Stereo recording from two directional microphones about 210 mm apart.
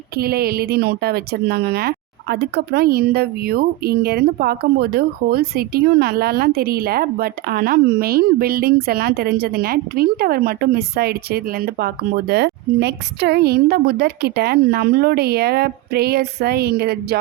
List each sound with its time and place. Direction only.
0.2 s speech: 45° right (ahead or behind)